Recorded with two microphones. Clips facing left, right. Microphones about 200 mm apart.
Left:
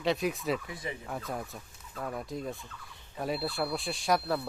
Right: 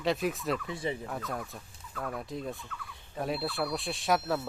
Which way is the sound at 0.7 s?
30° right (ahead or behind).